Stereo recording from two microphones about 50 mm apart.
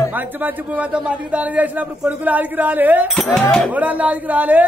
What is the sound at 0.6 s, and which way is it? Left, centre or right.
A man's voice, right.